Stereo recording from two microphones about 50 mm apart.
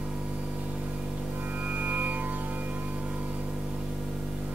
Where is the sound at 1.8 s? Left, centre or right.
Right.